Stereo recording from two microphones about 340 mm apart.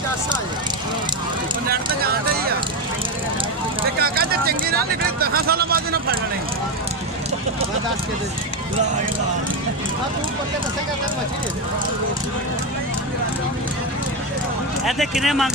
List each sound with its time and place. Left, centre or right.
4.0 s a sound: right
5.2 s speech: right
14.9 s speech: centre